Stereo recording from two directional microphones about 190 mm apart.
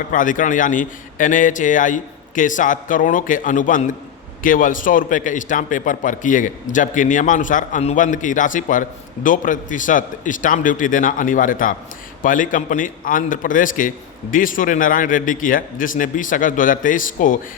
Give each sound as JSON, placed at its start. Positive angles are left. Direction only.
{"t": 0.1, "sound": "a man's voice", "side_deg": 45}